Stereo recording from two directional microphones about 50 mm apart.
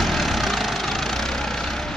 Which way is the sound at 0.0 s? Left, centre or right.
Centre.